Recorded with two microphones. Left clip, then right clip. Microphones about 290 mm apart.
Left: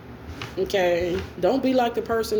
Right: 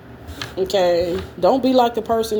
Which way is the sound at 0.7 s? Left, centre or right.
Right.